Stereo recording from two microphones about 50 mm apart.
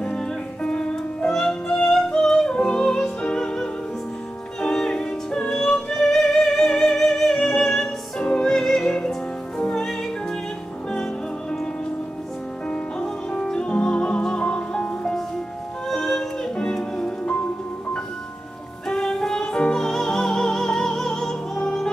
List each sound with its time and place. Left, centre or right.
0.0 s music: centre
2.0 s yodeling: centre
2.5 s music: centre
4.6 s music: centre
12.6 s music: centre
18.9 s music: centre